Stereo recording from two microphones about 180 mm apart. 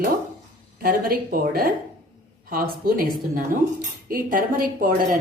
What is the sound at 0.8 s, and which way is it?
A woman's voice, 55° right (ahead or behind).